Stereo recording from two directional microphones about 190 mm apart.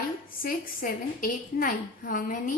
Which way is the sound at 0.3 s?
45° left (ahead or behind).